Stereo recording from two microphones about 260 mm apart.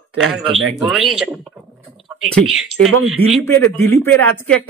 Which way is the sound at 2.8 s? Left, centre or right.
Right.